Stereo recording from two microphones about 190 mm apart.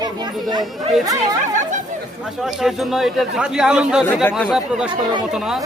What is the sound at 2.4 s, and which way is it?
A man's voice, centre (ahead or behind).